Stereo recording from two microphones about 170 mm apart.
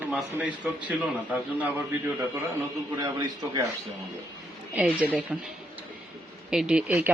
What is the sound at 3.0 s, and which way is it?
Speech, 25° right (ahead or behind).